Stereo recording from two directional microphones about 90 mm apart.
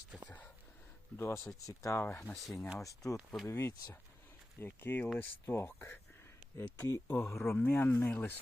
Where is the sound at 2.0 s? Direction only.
25° left (ahead or behind).